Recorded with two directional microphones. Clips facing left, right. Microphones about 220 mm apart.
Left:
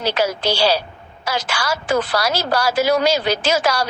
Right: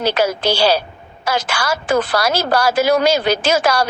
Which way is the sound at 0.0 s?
50° right (ahead or behind).